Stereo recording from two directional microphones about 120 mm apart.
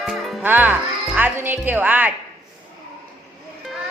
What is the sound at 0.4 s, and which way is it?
Speech, 15° right (ahead or behind).